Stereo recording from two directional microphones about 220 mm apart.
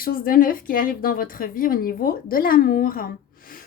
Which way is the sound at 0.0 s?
40° left (ahead or behind).